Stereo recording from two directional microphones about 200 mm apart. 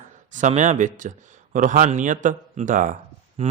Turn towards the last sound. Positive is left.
turn(degrees=-35)  # may be behind; listen again after turning